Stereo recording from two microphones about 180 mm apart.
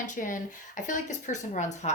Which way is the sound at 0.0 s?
45° left (ahead or behind).